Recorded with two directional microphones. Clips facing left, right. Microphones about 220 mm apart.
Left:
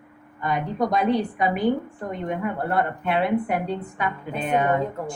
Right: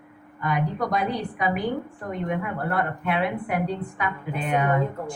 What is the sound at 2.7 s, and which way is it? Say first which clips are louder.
A woman's voice: left 1 dB; 25° left (ahead or behind).